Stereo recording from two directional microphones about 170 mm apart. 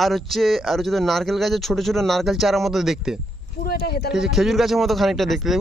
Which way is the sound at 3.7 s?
70° left (ahead or behind).